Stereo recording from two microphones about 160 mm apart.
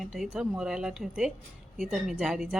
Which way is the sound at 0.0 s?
Centre (ahead or behind).